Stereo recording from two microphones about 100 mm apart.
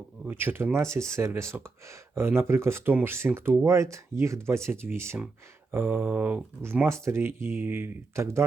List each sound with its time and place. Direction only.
0.3 s speech: 20° right (ahead or behind)